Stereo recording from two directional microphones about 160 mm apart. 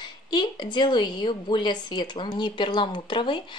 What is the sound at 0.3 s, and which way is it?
Speech, 30° left (ahead or behind).